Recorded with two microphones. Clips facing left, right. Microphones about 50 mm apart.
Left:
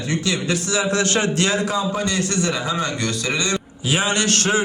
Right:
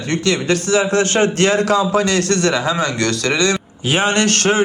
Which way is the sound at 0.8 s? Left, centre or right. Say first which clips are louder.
Right 2 dB; right.